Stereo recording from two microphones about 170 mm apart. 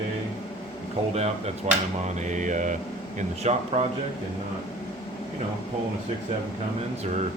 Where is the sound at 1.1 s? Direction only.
40° right (ahead or behind).